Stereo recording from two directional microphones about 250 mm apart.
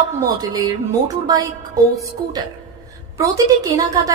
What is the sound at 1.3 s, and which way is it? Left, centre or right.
Speech, centre.